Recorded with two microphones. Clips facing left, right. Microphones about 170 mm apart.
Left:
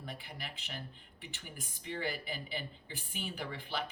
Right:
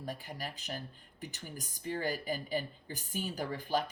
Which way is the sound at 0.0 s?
40° right (ahead or behind).